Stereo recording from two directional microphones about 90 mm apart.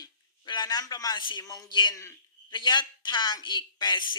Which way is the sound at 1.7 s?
60° left (ahead or behind).